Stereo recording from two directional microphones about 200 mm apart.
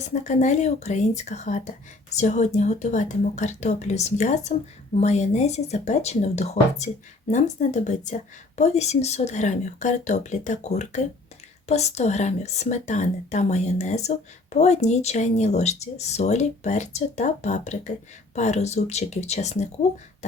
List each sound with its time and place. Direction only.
0.0 s speech: 35° left (ahead or behind)